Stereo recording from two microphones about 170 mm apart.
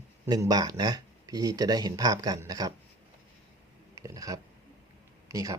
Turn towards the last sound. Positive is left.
turn(degrees=-20)  # may be behind; listen again after turning